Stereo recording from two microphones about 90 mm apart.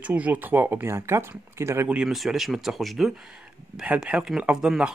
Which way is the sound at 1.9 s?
10° right (ahead or behind).